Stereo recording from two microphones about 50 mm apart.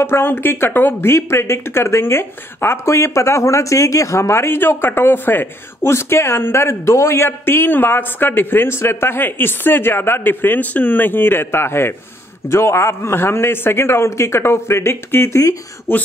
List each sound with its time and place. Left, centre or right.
0.0 s speech: left
5.9 s speech: left
7.2 s speech: left